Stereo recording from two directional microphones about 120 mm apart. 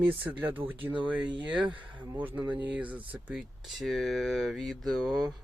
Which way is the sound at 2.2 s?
15° right (ahead or behind).